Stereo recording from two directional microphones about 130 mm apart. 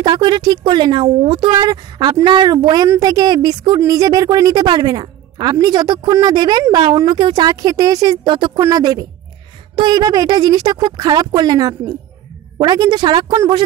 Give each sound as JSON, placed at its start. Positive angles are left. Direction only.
{"t": 0.0, "sound": "speech", "side_deg": -35}
{"t": 8.5, "sound": "speech", "side_deg": -25}